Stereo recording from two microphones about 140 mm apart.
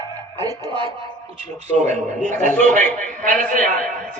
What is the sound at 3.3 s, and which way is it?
Speech, 70° right (ahead or behind).